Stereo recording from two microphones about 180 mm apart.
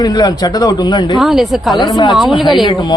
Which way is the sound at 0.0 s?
20° left (ahead or behind).